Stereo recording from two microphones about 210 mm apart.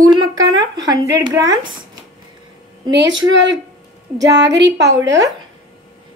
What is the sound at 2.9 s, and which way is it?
A woman's voice, 60° right (ahead or behind).